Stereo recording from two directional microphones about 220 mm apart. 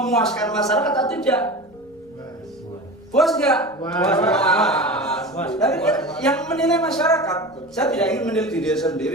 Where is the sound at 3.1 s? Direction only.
Centre (ahead or behind).